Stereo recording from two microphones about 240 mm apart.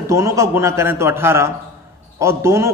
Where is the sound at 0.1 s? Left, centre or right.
Centre.